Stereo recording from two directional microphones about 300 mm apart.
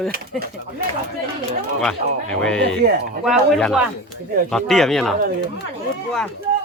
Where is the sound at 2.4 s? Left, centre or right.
Centre.